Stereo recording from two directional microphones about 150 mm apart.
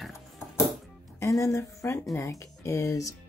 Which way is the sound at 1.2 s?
20° left (ahead or behind).